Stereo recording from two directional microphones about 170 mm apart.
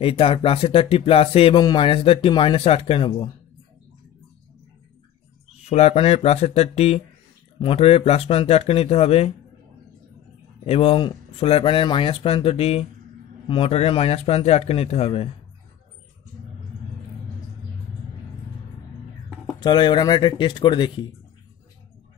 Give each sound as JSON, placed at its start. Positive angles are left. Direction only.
{"t": 0.0, "sound": "speech", "side_deg": 30}
{"t": 5.7, "sound": "speech", "side_deg": 40}
{"t": 10.6, "sound": "speech", "side_deg": 35}
{"t": 19.6, "sound": "speech", "side_deg": 25}